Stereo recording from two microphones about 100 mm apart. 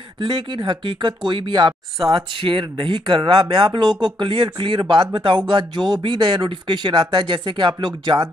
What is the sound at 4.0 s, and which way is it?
Speech, 50° right (ahead or behind).